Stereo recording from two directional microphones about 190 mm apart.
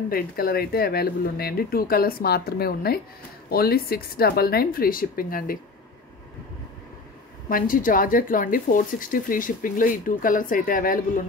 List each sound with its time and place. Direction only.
0.1 s speech: 50° left (ahead or behind)
7.4 s speech: 45° left (ahead or behind)